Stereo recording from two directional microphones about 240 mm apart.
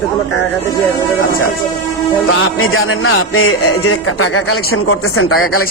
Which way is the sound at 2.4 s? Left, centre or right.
Left.